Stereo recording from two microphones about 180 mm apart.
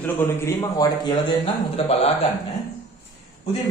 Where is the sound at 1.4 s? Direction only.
35° left (ahead or behind).